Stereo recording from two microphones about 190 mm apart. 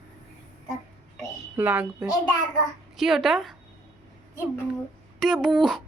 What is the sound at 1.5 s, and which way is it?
A woman's voice, 5° right (ahead or behind).